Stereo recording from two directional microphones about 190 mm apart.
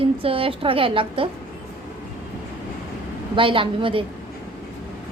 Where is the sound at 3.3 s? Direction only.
25° right (ahead or behind).